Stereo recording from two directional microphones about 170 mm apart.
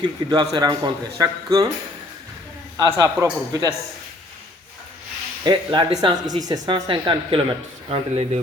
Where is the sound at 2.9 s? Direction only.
20° right (ahead or behind).